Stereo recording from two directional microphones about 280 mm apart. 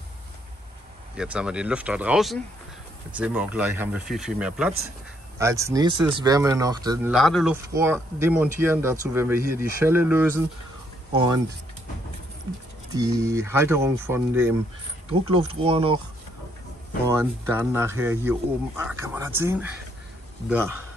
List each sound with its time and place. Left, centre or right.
1.1 s speech: centre
7.1 s speech: centre
12.9 s speech: centre
15.0 s speech: centre
17.6 s speech: centre